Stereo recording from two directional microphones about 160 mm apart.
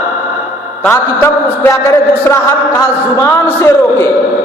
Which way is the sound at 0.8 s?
10° left (ahead or behind).